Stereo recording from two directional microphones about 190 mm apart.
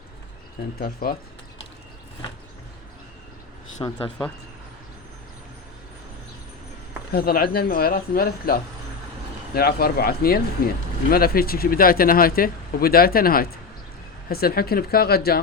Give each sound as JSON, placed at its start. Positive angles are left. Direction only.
{"t": 0.8, "sound": "speech", "side_deg": 50}
{"t": 3.8, "sound": "speech", "side_deg": 20}
{"t": 7.1, "sound": "speech", "side_deg": 55}